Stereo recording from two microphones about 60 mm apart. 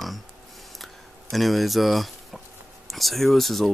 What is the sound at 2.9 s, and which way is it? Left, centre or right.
Speech, centre.